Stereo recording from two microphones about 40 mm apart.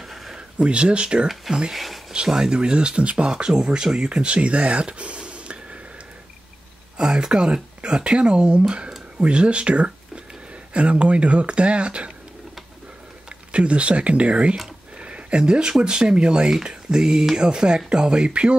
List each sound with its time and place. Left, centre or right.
0.0 s a sound: centre
0.6 s speech: right
1.7 s speech: centre
2.1 s speech: centre
7.0 s speech: centre
13.5 s speech: right
15.0 s a sound: right
15.8 s speech: centre